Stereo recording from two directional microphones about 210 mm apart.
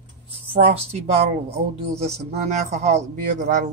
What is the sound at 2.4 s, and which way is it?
Speech, 35° right (ahead or behind).